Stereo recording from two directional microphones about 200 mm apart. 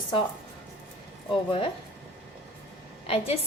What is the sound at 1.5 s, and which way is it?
Speech, 25° left (ahead or behind).